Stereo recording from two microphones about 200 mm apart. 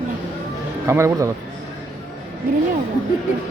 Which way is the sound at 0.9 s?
15° right (ahead or behind).